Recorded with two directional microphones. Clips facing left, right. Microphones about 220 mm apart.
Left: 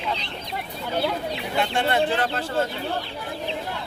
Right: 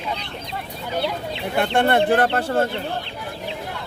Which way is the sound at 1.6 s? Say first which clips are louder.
Right 5 dB; 55° right (ahead or behind).